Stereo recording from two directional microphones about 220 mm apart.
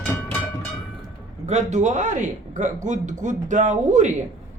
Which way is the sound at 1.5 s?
30° right (ahead or behind).